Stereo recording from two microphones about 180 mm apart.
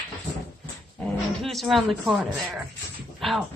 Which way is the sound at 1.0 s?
Centre (ahead or behind).